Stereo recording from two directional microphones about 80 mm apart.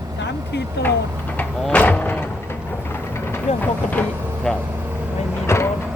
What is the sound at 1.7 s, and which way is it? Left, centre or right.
Vehicle, centre.